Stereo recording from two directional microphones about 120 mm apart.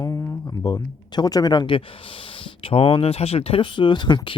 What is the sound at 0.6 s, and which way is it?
Speech, 35° left (ahead or behind).